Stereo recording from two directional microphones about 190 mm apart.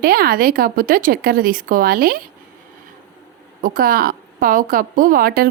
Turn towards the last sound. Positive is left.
turn(degrees=-50)  # may be behind; listen again after turning